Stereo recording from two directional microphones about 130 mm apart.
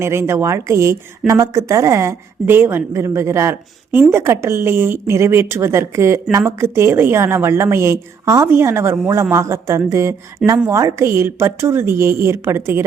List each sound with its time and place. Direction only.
0.0 s a woman's voice: 20° right (ahead or behind)